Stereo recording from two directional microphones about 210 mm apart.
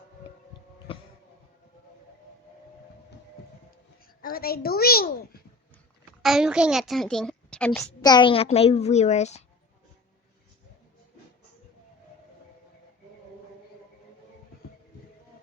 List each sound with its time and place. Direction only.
0.9 s music: 25° left (ahead or behind)
4.2 s a woman's voice: 45° left (ahead or behind)
6.2 s a child's voice: centre (ahead or behind)
8.0 s a woman's voice: 20° left (ahead or behind)